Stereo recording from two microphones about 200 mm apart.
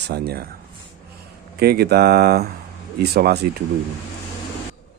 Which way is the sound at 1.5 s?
50° right (ahead or behind).